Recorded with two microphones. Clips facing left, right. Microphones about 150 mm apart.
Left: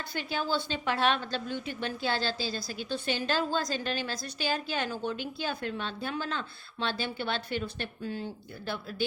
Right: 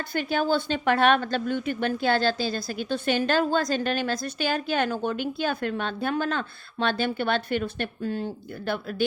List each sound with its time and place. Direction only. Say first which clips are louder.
0.1 s a woman's voice: right 7 dB; 55° right (ahead or behind)